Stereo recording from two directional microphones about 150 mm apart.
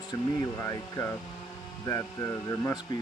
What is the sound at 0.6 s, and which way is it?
A man's voice, 20° left (ahead or behind).